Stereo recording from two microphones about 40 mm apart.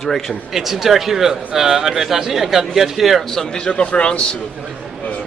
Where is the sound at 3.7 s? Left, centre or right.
Left.